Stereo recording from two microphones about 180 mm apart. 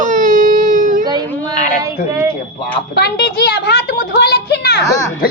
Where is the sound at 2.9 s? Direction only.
65° left (ahead or behind).